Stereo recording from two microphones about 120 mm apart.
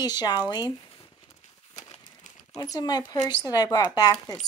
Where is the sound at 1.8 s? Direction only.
75° left (ahead or behind).